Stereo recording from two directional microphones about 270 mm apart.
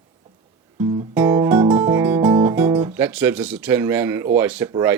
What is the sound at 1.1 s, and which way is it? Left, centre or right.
Guitar, centre.